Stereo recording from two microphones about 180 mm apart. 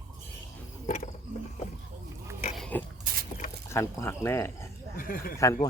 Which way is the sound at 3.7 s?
15° left (ahead or behind).